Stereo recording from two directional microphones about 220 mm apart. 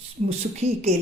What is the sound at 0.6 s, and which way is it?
Speech, 30° right (ahead or behind).